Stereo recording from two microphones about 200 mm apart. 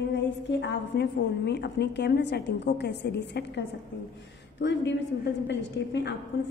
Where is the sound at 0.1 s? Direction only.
60° left (ahead or behind).